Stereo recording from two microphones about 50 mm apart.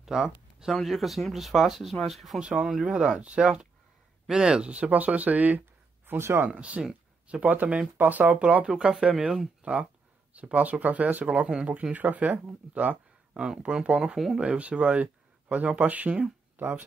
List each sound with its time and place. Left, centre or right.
0.0 s a sound: centre
0.7 s speech: centre
2.8 s speech: centre; by 5.6 s right
6.0 s speech: right
6.5 s speech: right
9.6 s a sound: right
10.3 s speech: right
13.4 s speech: centre
14.4 s speech: right
16.5 s speech: right